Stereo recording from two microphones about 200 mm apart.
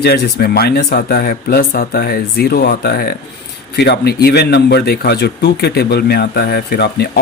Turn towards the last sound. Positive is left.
turn(degrees=55)  # may be behind; listen again after turning